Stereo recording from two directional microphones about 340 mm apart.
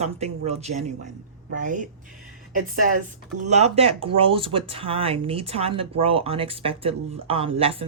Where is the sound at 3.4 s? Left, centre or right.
Centre.